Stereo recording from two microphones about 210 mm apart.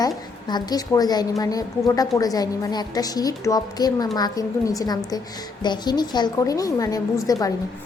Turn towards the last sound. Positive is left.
turn(degrees=15)  # may be behind; listen again after turning